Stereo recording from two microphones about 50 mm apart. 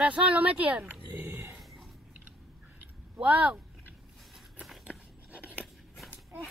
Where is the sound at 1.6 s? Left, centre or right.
Centre.